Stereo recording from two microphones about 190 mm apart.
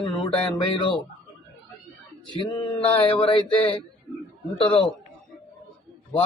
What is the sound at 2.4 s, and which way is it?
Mantra, 25° left (ahead or behind).